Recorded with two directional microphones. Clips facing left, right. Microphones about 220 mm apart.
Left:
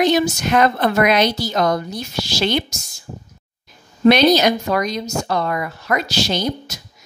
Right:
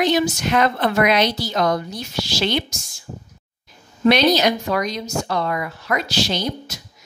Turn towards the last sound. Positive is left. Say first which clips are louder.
# left 2 dB
turn(degrees=40)  # may be behind; listen again after turning